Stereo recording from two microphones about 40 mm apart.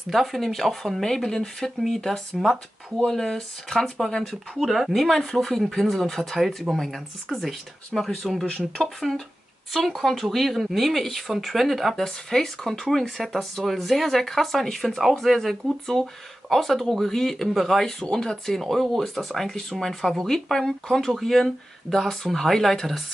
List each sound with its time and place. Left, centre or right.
0.1 s speech: centre
2.4 s speech: centre
3.1 s speech: centre
4.6 s speech: centre
8.5 s speech: centre
8.8 s speech: centre
12.3 s speech: centre